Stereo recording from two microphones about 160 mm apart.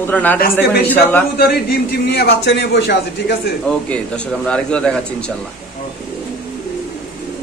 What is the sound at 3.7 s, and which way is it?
A man's voice, 5° left (ahead or behind).